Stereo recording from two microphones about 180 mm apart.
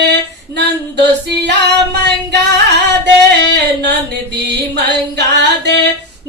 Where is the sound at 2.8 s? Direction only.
75° right (ahead or behind).